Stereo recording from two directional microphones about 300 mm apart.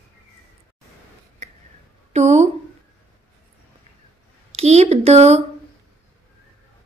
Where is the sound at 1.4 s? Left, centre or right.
Right.